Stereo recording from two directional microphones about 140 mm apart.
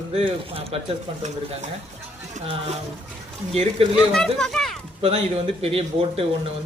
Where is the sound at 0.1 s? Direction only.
45° right (ahead or behind).